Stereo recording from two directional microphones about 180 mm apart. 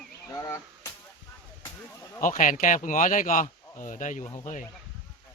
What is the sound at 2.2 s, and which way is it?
Speech, 45° left (ahead or behind).